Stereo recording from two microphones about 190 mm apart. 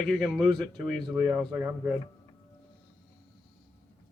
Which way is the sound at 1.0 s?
25° right (ahead or behind).